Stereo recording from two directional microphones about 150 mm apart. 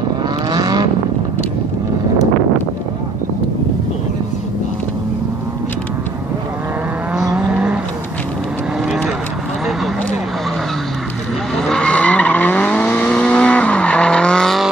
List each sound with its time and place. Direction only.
0.5 s vehicle: 25° right (ahead or behind)
7.3 s vehicle: 5° right (ahead or behind)
11.5 s vehicle: 5° left (ahead or behind)